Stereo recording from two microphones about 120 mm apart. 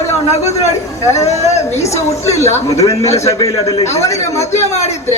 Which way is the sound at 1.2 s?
65° left (ahead or behind).